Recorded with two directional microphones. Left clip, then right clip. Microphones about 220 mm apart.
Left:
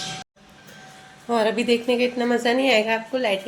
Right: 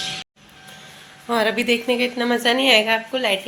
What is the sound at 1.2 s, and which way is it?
A woman's voice, centre (ahead or behind).